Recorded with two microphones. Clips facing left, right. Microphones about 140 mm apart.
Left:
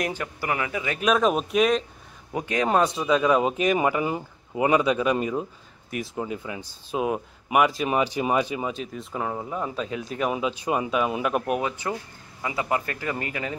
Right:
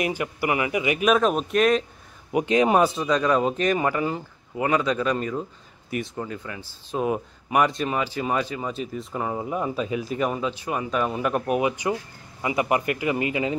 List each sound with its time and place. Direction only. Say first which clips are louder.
0.0 s a man's voice: right 3 dB; 10° right (ahead or behind)
1.0 s speech: even; centre (ahead or behind)
2.3 s speech: right 4 dB; 20° right (ahead or behind)
2.8 s speech: even; centre (ahead or behind)
7.9 s speech: left 2 dB; 15° left (ahead or behind)
8.7 s speech: right 2 dB; centre (ahead or behind)
10.4 s speech: left 2 dB; 15° left (ahead or behind)
11.6 s a man's voice: right 4 dB; 15° right (ahead or behind)